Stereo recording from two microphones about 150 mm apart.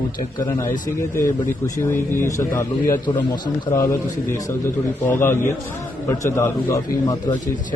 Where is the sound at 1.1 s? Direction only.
20° left (ahead or behind).